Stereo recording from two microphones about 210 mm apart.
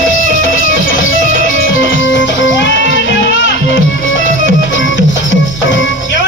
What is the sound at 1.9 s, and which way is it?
Music, 60° left (ahead or behind).